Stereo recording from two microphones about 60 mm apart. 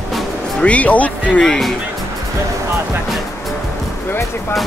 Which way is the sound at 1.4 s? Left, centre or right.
Centre.